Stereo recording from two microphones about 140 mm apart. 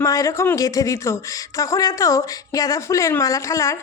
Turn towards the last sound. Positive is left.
turn(degrees=20)  # may be behind; listen again after turning